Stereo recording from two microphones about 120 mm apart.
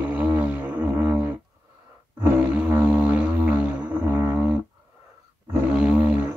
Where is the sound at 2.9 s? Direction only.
10° right (ahead or behind).